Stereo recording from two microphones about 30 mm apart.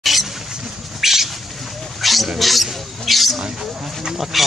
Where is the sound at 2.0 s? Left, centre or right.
Centre.